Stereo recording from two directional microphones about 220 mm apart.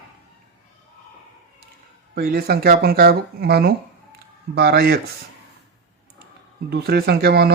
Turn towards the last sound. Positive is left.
turn(degrees=-45)  # may be behind; listen again after turning